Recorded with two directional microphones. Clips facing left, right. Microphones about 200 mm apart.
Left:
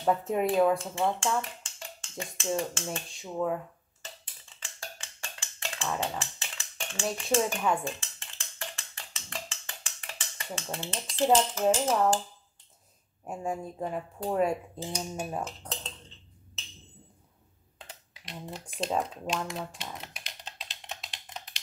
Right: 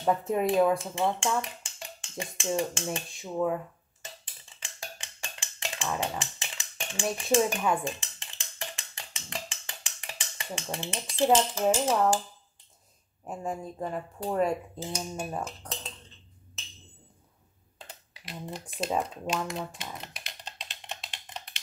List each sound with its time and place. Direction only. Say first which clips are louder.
0.0 s speech: even; centre (ahead or behind)
1.4 s speech: right 1 dB; 15° right (ahead or behind)
3.2 s speech: right 2 dB; centre (ahead or behind)
4.6 s a sound: right 1 dB; 15° right (ahead or behind)
7.2 s speech: right 3 dB; 15° right (ahead or behind)
7.8 s a sound: right 1 dB; 15° right (ahead or behind)
11.2 s speech: even; 5° right (ahead or behind)
13.2 s speech: left 1 dB; 10° left (ahead or behind)
17.7 s typing: right 1 dB; 5° right (ahead or behind)